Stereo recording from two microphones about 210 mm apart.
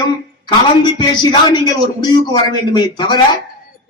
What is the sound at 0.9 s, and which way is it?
A man's voice, 20° left (ahead or behind).